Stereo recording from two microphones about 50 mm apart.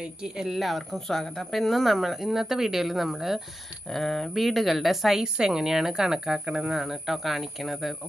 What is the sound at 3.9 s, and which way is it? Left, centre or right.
A woman's voice, centre.